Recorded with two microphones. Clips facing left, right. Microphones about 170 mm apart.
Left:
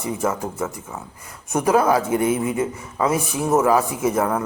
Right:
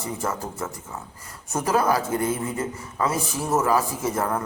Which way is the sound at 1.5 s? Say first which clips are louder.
Left 5 dB; 15° left (ahead or behind).